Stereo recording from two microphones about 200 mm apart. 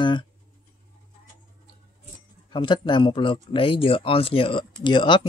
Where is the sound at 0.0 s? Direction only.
25° left (ahead or behind).